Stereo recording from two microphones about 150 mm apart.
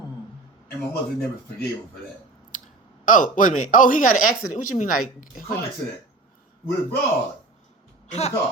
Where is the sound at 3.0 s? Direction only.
60° left (ahead or behind).